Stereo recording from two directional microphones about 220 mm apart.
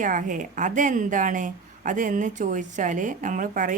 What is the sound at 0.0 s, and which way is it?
Speech, 35° right (ahead or behind).